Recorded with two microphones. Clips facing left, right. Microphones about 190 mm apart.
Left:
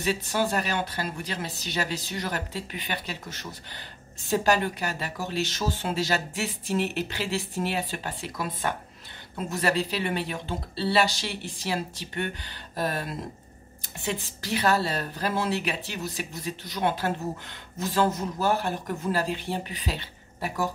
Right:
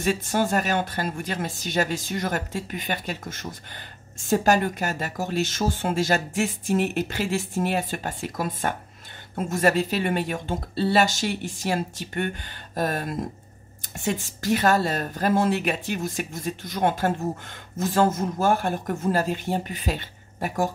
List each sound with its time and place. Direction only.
0.0 s speech: 45° right (ahead or behind)